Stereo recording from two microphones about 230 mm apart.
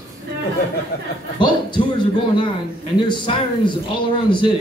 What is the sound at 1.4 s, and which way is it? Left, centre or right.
Speech, centre.